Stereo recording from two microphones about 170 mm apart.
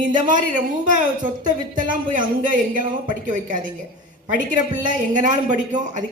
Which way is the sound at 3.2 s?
50° right (ahead or behind).